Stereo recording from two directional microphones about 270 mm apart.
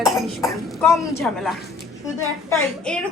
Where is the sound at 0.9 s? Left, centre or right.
Centre.